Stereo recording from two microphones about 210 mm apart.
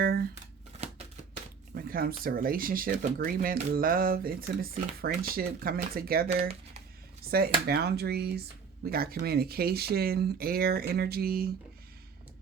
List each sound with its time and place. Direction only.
0.0 s shuffling cards: 45° right (ahead or behind)
1.7 s speech: 45° right (ahead or behind)
7.7 s speech: 50° right (ahead or behind)